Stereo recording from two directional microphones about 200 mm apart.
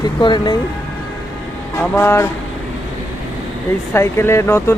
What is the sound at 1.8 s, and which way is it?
Speech, 10° left (ahead or behind).